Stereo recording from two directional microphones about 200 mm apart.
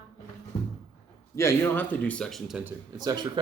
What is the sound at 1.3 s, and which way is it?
Speech, 10° left (ahead or behind).